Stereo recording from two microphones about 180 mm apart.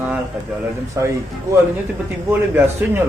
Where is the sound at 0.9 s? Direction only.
15° right (ahead or behind).